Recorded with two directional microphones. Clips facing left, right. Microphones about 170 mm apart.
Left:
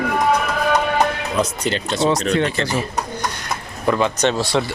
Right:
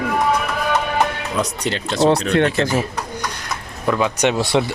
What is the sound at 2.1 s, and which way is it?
Speech, 60° right (ahead or behind).